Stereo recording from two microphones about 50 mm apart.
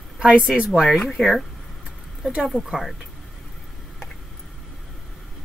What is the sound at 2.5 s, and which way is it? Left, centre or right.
Speech, centre.